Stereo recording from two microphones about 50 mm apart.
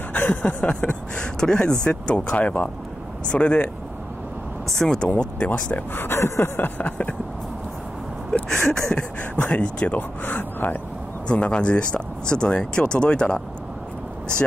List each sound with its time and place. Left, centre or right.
0.1 s speech: left
4.7 s a sound: centre
5.2 s speech: left
5.9 s speech: left
6.8 s speech: left
8.5 s a sound: centre
9.3 s speech: left
9.9 s a man's voice: left
11.2 s speech: left